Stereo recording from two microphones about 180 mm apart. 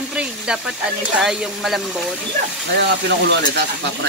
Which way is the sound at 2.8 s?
75° right (ahead or behind).